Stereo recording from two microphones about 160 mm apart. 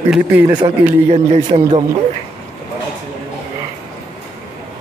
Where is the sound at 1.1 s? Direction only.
40° right (ahead or behind).